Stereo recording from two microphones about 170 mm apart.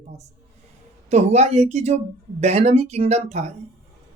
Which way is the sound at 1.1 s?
40° right (ahead or behind).